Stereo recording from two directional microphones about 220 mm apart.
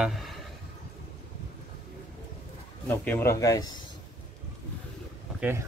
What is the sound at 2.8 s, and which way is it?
Speech, 10° left (ahead or behind).